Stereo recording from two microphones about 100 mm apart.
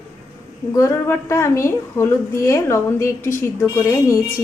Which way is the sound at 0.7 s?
30° left (ahead or behind).